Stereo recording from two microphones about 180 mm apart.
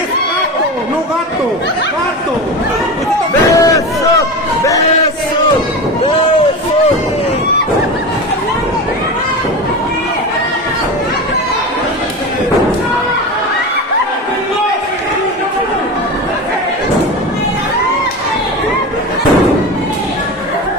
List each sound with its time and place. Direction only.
3.4 s run: 20° left (ahead or behind)